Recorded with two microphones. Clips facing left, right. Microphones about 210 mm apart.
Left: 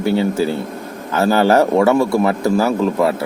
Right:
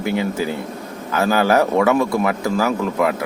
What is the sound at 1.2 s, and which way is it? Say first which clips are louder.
Speech: left 3 dB; 30° left (ahead or behind).